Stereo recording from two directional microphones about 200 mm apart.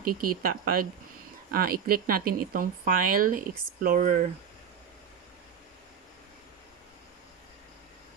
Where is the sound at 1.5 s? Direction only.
50° right (ahead or behind).